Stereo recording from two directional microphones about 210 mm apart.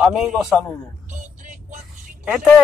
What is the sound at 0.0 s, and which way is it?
Speech, 5° right (ahead or behind).